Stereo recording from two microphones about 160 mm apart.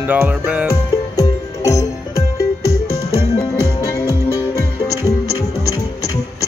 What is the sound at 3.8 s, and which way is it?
Music, 20° left (ahead or behind).